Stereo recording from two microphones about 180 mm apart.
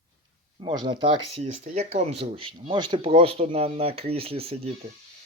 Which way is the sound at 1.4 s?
40° right (ahead or behind).